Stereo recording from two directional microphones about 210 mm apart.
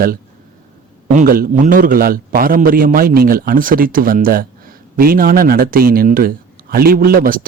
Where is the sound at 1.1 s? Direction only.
45° right (ahead or behind).